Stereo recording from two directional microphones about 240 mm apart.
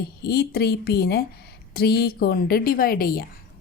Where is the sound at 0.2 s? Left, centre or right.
Left.